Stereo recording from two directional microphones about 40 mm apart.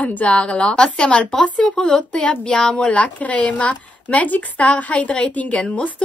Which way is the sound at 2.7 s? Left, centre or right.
Left.